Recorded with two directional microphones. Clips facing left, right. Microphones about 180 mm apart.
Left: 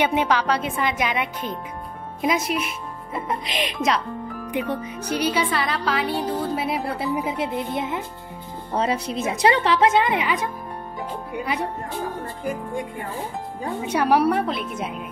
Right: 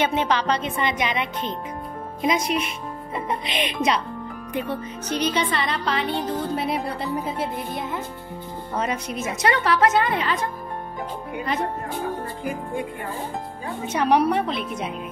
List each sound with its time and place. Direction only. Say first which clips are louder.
0.0 s a woman's voice: left 1 dB; 10° left (ahead or behind)
2.2 s music: even; 5° left (ahead or behind)
4.5 s a woman's voice: left 2 dB; 15° left (ahead or behind)
8.7 s a woman's voice: left 3 dB; 30° left (ahead or behind); by 10.5 s 15° left (ahead or behind)
13.8 s a woman's voice: even; 10° left (ahead or behind)